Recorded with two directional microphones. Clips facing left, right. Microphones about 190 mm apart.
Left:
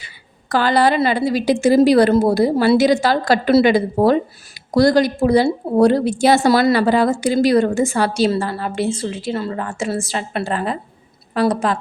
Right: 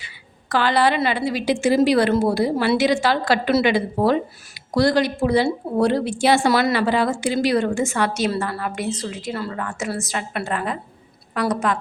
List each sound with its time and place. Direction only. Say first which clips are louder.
0.0 s a woman's voice: even; 40° left (ahead or behind)